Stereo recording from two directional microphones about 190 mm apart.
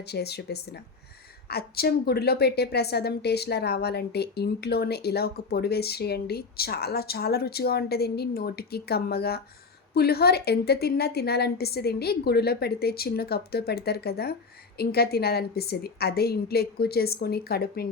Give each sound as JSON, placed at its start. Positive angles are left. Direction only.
{"t": 0.0, "sound": "a woman's voice", "side_deg": 60}